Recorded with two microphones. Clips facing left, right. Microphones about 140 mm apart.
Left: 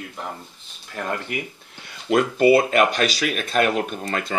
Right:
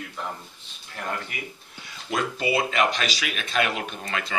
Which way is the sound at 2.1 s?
50° left (ahead or behind).